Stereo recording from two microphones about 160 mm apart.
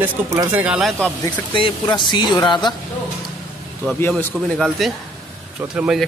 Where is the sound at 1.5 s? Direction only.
30° left (ahead or behind).